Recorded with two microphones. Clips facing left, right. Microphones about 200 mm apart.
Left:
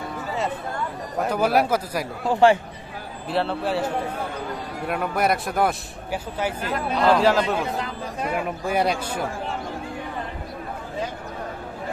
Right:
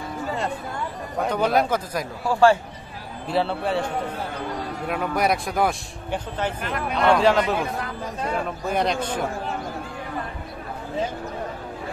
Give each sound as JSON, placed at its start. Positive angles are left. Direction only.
{"t": 1.1, "sound": "a man's voice", "side_deg": 5}
{"t": 2.2, "sound": "speech", "side_deg": 20}
{"t": 3.3, "sound": "speech", "side_deg": 0}
{"t": 8.2, "sound": "a man's voice", "side_deg": 10}